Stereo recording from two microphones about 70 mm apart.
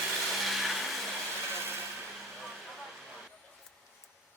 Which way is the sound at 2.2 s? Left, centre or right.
Centre.